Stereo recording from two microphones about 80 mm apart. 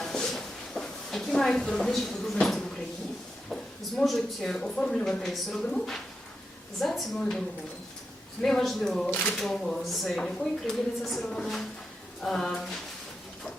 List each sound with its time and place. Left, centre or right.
0.0 s a sound: centre
3.5 s speech: centre
9.0 s speech: left
9.3 s speech: centre